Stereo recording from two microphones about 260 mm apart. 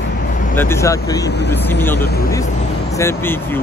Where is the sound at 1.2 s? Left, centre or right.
Left.